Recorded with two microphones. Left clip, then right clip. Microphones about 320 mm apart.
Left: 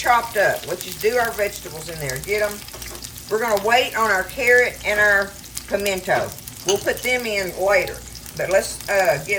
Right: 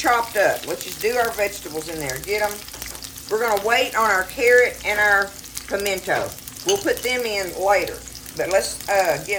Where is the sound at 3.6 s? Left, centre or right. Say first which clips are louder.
Left 2 dB; centre.